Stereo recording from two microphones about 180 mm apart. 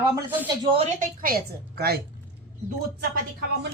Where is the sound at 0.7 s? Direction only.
45° right (ahead or behind); by 2.0 s 60° right (ahead or behind).